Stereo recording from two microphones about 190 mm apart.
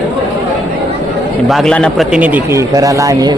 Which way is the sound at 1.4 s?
Centre (ahead or behind).